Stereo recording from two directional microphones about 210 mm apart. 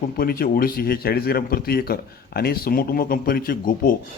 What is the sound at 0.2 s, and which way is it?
A man's voice, 45° left (ahead or behind).